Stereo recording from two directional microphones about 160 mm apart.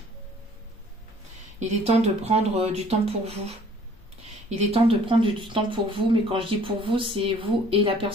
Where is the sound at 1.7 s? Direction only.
45° right (ahead or behind).